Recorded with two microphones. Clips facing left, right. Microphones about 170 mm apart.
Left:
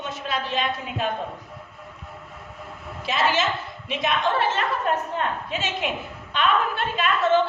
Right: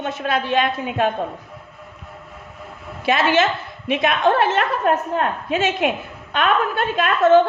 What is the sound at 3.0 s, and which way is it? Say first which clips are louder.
A woman's voice: right 6 dB; 65° right (ahead or behind).